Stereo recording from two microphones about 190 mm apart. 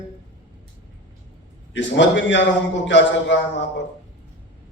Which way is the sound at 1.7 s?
75° left (ahead or behind).